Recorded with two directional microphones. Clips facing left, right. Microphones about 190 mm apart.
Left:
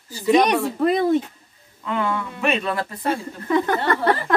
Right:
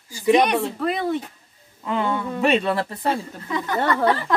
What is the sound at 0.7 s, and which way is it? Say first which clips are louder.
Speech: left 5 dB; 40° left (ahead or behind).